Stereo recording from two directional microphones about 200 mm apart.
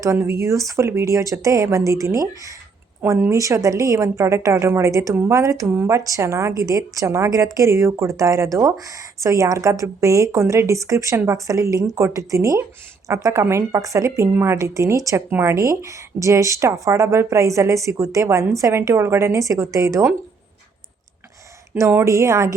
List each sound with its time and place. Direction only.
0.0 s speech: 15° right (ahead or behind)
21.8 s speech: 15° right (ahead or behind)